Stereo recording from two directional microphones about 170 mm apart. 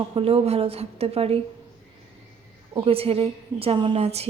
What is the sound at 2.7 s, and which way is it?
A woman's voice, 30° right (ahead or behind).